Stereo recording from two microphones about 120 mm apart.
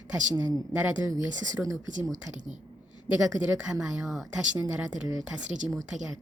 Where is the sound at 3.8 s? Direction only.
5° right (ahead or behind).